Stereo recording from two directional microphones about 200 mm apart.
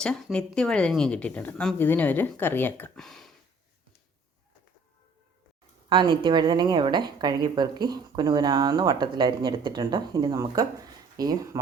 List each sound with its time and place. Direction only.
0.0 s speech: 5° left (ahead or behind)
5.9 s a woman's voice: 25° right (ahead or behind)